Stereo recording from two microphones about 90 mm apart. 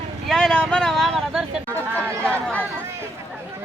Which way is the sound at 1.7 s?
20° left (ahead or behind).